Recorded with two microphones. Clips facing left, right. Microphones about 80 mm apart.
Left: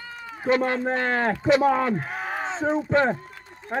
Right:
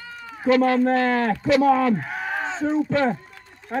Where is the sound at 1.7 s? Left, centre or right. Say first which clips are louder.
Right 4 dB; centre.